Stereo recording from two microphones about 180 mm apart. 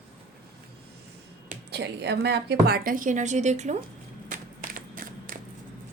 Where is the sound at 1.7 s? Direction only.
70° right (ahead or behind); by 3.8 s 40° right (ahead or behind).